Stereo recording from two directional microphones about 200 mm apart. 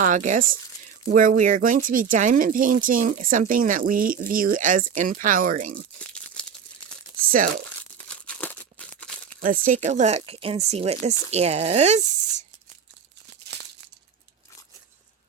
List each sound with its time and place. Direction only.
0.0 s speech: 40° right (ahead or behind)
6.0 s tearing: 5° left (ahead or behind)
7.3 s speech: 45° right (ahead or behind)
8.0 s crumpling: 5° left (ahead or behind)
9.4 s speech: 40° right (ahead or behind)